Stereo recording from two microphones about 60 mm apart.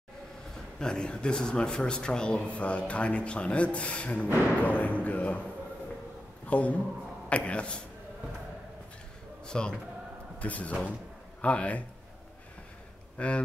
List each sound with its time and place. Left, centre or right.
0.7 s a man's voice: centre
6.4 s speech: left
9.5 s a man's voice: centre
13.2 s speech: left